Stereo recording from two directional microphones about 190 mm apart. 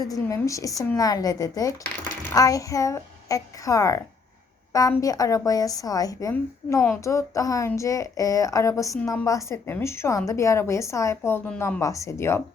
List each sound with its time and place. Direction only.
0.0 s a woman's voice: 20° left (ahead or behind)